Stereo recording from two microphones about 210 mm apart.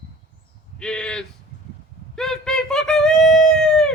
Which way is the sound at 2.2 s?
Centre (ahead or behind).